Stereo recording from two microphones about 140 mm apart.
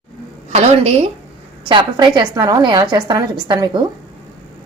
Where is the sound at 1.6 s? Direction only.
35° right (ahead or behind).